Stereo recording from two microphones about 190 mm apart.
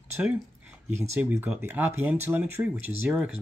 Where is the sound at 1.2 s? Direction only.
10° right (ahead or behind).